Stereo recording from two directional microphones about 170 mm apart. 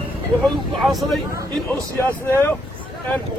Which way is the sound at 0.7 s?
Centre (ahead or behind).